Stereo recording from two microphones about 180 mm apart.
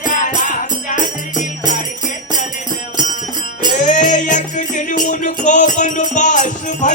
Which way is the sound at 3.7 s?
45° left (ahead or behind).